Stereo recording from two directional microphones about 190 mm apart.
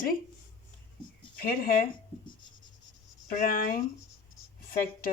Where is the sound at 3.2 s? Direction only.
50° left (ahead or behind).